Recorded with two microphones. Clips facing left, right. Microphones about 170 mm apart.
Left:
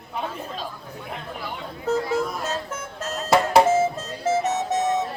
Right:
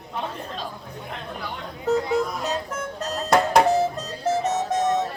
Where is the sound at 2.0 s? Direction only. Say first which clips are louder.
Even; 20° right (ahead or behind).